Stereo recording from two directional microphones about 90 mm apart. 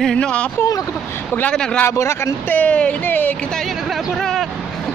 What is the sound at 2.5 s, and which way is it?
Speech, 15° left (ahead or behind).